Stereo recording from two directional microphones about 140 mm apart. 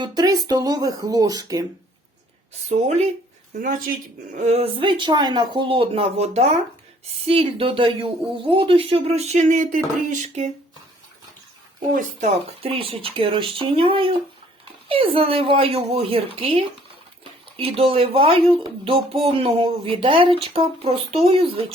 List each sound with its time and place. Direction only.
0.0 s speech: 30° right (ahead or behind)
2.6 s speech: 55° right (ahead or behind)
3.6 s speech: 75° right (ahead or behind)
4.4 s speech: 50° right (ahead or behind)
12.6 s speech: 40° right (ahead or behind)